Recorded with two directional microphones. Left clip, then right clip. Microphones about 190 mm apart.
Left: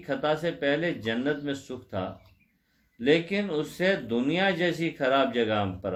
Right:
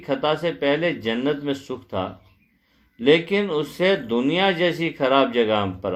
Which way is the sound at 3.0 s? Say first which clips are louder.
Right 7 dB; 20° right (ahead or behind).